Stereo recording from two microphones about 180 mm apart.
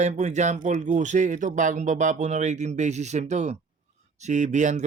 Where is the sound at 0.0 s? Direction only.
40° right (ahead or behind).